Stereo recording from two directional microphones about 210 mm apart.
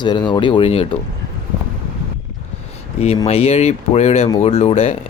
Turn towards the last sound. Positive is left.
turn(degrees=25)  # may be behind; listen again after turning